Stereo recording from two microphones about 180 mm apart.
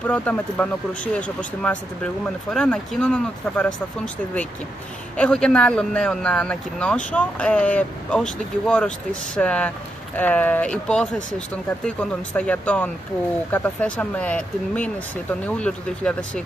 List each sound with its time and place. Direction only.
0.0 s speech: 5° left (ahead or behind)